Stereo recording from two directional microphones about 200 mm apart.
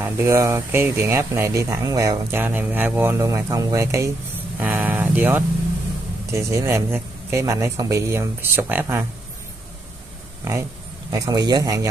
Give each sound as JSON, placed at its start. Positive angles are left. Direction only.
{"t": 0.0, "sound": "speech", "side_deg": -15}
{"t": 10.4, "sound": "a man's voice", "side_deg": -15}